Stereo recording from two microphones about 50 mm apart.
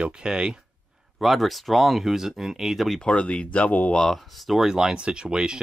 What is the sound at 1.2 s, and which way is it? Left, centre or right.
Speech, centre.